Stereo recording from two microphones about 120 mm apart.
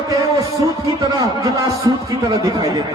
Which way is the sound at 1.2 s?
35° right (ahead or behind).